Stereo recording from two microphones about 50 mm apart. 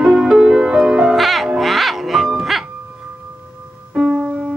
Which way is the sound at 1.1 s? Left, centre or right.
Centre.